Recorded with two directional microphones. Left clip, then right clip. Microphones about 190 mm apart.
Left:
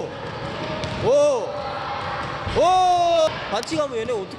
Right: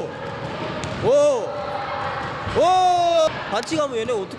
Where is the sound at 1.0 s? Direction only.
10° right (ahead or behind).